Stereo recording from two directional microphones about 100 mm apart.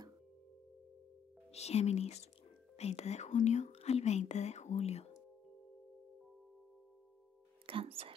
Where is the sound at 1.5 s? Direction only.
90° left.